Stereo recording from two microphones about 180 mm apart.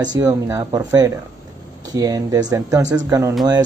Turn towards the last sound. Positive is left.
turn(degrees=-20)  # may be behind; listen again after turning